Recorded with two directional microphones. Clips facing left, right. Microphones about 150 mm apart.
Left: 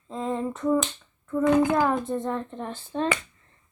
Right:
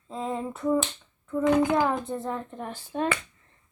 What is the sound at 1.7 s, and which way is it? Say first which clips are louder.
A child's voice: left 2 dB; 5° right (ahead or behind).